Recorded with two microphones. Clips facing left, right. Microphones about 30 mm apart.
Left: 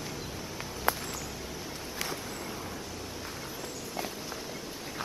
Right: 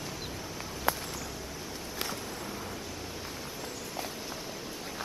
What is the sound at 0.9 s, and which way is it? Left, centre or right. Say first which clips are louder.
Walk: left 1 dB; centre.